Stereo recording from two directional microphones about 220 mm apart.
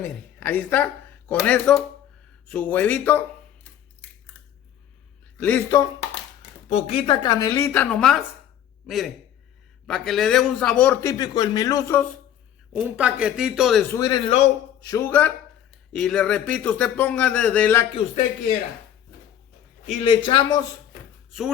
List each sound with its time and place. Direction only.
0.0 s a woman's voice: 10° left (ahead or behind)
5.4 s a man's voice: 10° left (ahead or behind)
6.7 s a man's voice: 25° left (ahead or behind)
12.7 s speech: 5° right (ahead or behind)
14.0 s a man's voice: 20° left (ahead or behind)
19.9 s speech: 25° left (ahead or behind)
21.2 s a sound: centre (ahead or behind)